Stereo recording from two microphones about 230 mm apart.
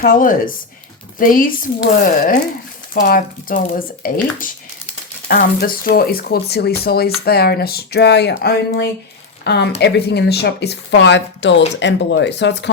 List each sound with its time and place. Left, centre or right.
0.0 s speech: left